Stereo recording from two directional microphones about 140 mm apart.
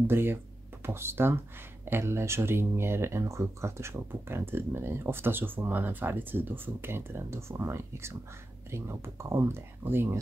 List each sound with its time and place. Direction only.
0.0 s speech: 15° right (ahead or behind)